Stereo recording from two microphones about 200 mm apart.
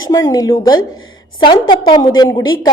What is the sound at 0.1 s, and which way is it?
A woman's voice, 15° left (ahead or behind).